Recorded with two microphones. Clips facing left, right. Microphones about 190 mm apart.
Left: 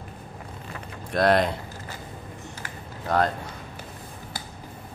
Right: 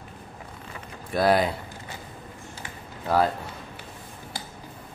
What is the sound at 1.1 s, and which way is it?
Speech, 5° right (ahead or behind).